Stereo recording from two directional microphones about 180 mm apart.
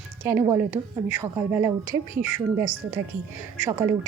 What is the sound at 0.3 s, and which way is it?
A woman's voice, 15° right (ahead or behind).